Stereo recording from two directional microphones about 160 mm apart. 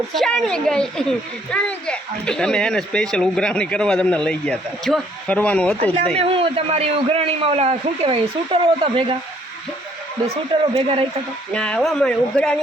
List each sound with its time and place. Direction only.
0.1 s speech: centre (ahead or behind)
6.1 s a man's voice: 35° right (ahead or behind)
10.8 s a man's voice: 35° right (ahead or behind)
11.5 s speech: 5° left (ahead or behind)